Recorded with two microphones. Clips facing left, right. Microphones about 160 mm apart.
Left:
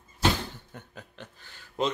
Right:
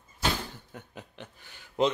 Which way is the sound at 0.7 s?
15° right (ahead or behind).